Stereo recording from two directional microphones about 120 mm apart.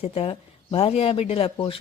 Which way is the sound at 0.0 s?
55° left (ahead or behind).